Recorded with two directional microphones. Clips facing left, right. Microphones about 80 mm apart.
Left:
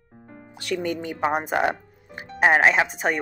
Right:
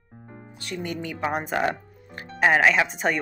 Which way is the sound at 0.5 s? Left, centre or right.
Left.